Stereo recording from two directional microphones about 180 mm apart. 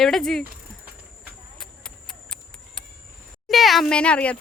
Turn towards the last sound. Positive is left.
turn(degrees=5)  # may be behind; listen again after turning